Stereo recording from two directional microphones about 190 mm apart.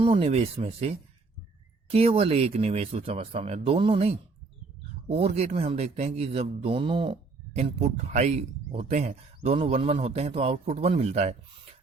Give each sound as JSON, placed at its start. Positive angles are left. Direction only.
{"t": 0.0, "sound": "speech", "side_deg": -30}